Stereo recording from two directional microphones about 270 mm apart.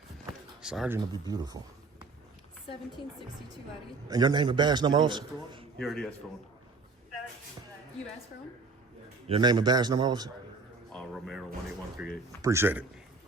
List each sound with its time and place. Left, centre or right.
0.6 s a man's voice: centre
4.1 s a man's voice: centre
5.8 s a man's voice: centre
9.2 s a man's voice: centre
10.9 s a man's voice: centre